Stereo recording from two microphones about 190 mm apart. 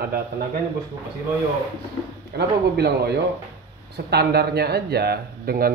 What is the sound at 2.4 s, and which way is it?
Speech, 60° right (ahead or behind).